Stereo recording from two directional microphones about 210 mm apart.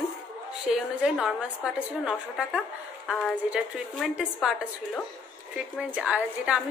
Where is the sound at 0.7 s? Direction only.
Centre (ahead or behind).